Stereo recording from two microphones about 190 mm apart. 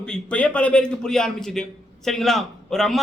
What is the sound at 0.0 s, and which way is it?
A man's voice, 5° left (ahead or behind).